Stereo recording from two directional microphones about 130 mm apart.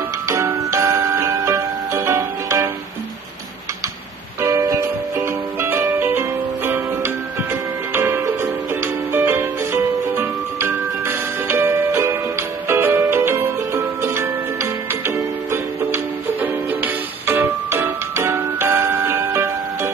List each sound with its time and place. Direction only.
0.3 s music: 20° right (ahead or behind)
4.4 s music: 20° right (ahead or behind)